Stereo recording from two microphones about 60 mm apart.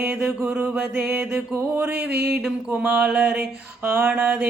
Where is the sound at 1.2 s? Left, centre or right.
Centre.